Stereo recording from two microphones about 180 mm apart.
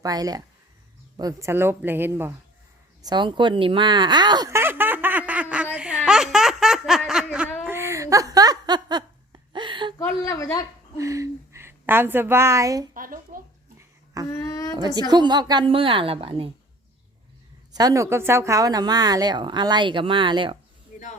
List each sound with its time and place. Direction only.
0.0 s a woman's voice: 20° right (ahead or behind)
3.0 s a sound: 25° right (ahead or behind); by 6.0 s 5° right (ahead or behind)
6.1 s snicker: centre (ahead or behind)
7.6 s a sound: 15° right (ahead or behind)
10.0 s a woman's voice: 15° left (ahead or behind)
10.9 s a woman's voice: 15° right (ahead or behind)
12.9 s speech: 50° right (ahead or behind)
14.3 s a woman's voice: 15° left (ahead or behind)
14.7 s a woman's voice: 20° right (ahead or behind)
17.7 s a woman's voice: 20° right (ahead or behind)
20.9 s a sound: 45° left (ahead or behind)